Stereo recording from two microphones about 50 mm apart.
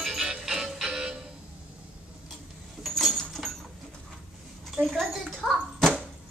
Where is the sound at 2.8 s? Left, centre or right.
Centre.